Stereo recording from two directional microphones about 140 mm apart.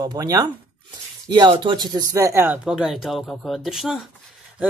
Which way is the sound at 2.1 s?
20° right (ahead or behind).